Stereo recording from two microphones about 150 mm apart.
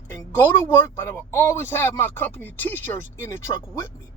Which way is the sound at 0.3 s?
15° left (ahead or behind).